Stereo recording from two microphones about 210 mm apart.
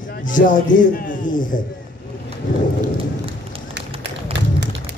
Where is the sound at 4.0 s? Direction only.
55° right (ahead or behind).